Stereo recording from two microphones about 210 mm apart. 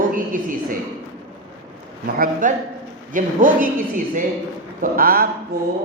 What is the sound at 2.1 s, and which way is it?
Speech, 40° right (ahead or behind).